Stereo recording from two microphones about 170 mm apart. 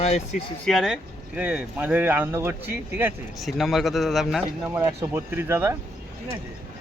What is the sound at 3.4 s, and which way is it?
A man's voice, centre (ahead or behind).